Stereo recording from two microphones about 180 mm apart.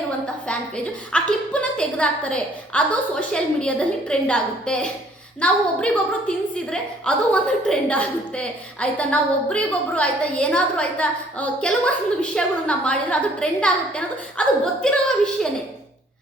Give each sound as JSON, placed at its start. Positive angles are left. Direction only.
{"t": 1.1, "sound": "a woman's voice", "side_deg": 5}